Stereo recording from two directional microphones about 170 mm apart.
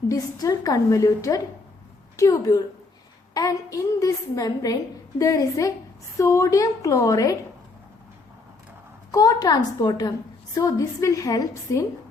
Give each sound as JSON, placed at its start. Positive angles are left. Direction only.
{"t": 0.1, "sound": "a woman's voice", "side_deg": 20}
{"t": 9.1, "sound": "a woman's voice", "side_deg": 20}